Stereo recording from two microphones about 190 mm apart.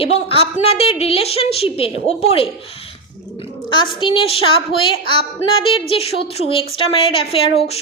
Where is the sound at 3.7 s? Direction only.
25° left (ahead or behind).